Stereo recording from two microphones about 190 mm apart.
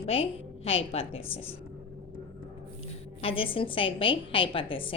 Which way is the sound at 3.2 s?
30° left (ahead or behind).